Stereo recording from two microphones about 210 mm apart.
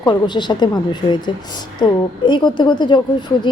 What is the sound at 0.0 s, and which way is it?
A woman's voice, 20° left (ahead or behind).